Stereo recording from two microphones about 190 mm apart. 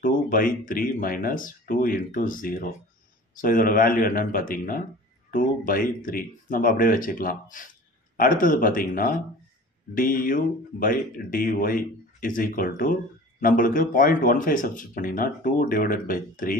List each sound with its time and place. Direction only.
0.0 s speech: 45° left (ahead or behind)